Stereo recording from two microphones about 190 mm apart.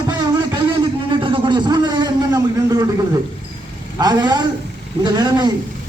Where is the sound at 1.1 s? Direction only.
25° right (ahead or behind).